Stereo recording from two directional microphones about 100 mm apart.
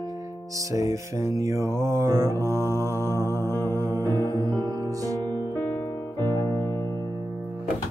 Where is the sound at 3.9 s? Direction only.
40° right (ahead or behind).